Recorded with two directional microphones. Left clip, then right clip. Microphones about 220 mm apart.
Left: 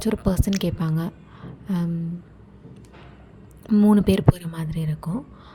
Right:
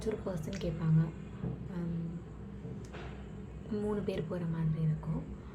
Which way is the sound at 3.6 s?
45° left (ahead or behind).